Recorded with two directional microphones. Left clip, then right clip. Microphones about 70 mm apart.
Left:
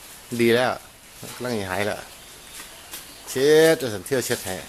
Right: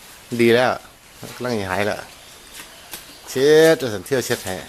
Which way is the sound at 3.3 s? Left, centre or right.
Centre.